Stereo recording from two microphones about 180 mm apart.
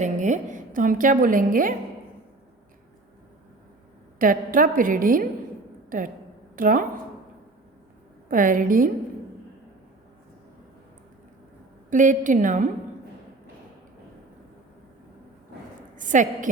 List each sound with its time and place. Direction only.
0.0 s a woman's voice: 40° right (ahead or behind)
4.2 s a woman's voice: 50° right (ahead or behind)
8.3 s a woman's voice: 50° right (ahead or behind)
11.9 s a woman's voice: 45° right (ahead or behind)
16.0 s a woman's voice: 45° right (ahead or behind)